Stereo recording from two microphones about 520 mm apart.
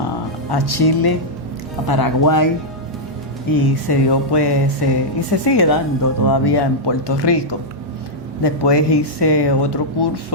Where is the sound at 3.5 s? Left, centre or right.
Left.